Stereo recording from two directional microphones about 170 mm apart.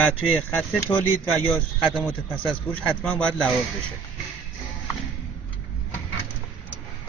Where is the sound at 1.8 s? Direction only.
5° right (ahead or behind).